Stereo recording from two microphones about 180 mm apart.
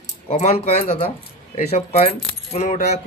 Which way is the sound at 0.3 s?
35° left (ahead or behind).